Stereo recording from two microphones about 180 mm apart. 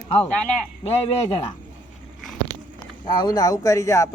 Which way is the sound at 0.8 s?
30° left (ahead or behind).